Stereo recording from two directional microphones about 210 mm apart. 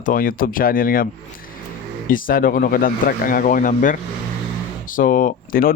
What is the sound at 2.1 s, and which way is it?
Speech, 40° left (ahead or behind).